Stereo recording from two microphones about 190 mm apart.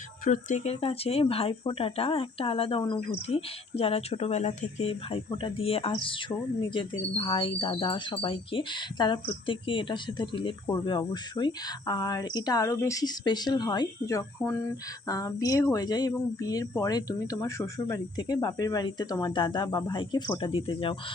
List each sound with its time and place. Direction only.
0.3 s speech: 40° left (ahead or behind)